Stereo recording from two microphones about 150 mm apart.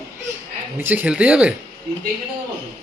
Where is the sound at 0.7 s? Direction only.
10° right (ahead or behind).